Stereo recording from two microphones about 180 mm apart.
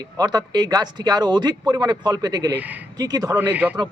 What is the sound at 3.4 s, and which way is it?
Speech, 10° right (ahead or behind).